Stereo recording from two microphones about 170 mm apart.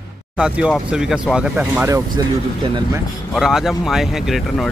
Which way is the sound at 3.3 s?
Centre (ahead or behind).